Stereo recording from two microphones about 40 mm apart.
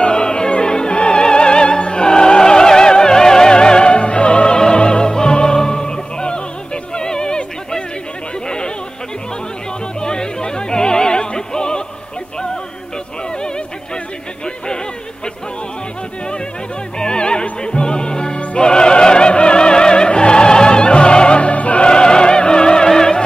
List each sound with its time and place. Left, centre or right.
0.0 s opera: left
8.5 s a sound: left
9.9 s music: left
17.0 s music: left
18.6 s opera: left